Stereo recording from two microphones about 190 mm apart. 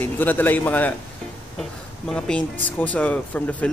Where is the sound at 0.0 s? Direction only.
10° left (ahead or behind).